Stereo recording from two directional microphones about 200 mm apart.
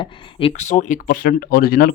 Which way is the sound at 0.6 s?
35° left (ahead or behind).